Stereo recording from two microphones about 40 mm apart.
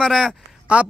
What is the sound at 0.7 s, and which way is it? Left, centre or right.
Speech, right.